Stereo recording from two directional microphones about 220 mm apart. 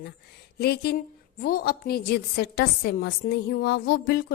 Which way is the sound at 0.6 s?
45° left (ahead or behind).